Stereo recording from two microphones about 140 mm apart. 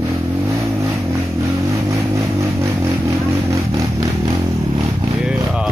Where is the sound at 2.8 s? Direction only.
20° right (ahead or behind).